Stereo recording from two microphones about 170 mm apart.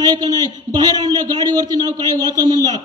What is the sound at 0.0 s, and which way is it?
A man's voice, 25° right (ahead or behind).